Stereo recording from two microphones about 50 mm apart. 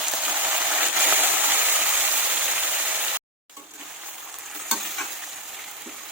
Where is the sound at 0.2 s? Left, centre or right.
Right.